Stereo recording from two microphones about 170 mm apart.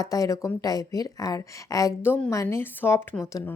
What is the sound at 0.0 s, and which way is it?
Speech, 20° left (ahead or behind).